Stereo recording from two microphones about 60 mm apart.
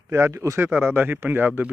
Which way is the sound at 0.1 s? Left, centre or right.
Right.